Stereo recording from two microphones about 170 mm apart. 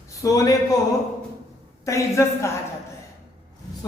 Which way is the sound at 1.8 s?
15° left (ahead or behind).